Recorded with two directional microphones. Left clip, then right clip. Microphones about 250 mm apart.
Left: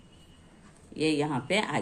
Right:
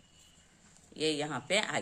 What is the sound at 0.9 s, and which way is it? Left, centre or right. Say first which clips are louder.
Speech: left 5 dB; centre.